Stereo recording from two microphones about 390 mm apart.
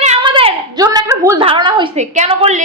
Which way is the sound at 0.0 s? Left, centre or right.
Centre.